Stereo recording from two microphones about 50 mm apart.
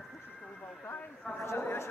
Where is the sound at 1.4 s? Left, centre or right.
Left.